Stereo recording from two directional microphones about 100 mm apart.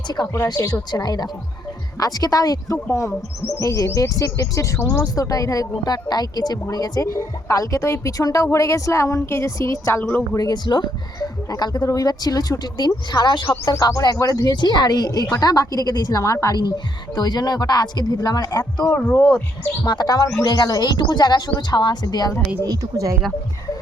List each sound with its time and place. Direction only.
0.4 s a woman's voice: 40° left (ahead or behind); by 10.2 s 15° left (ahead or behind)
10.3 s speech: 40° left (ahead or behind)
16.6 s speech: 45° left (ahead or behind)
18.9 s speech: 20° left (ahead or behind)
19.8 s speech: 45° left (ahead or behind)
22.6 s speech: 35° right (ahead or behind)